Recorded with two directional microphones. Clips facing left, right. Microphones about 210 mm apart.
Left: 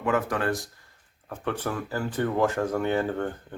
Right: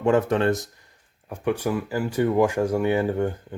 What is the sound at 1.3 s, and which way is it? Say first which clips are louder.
Speech: right 6 dB; 10° right (ahead or behind).